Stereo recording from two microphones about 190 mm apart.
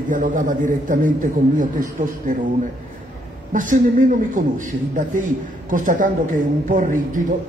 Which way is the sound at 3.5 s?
45° right (ahead or behind).